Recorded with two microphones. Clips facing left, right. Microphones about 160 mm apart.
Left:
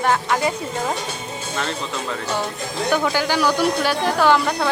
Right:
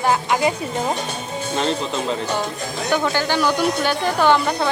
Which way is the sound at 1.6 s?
20° right (ahead or behind).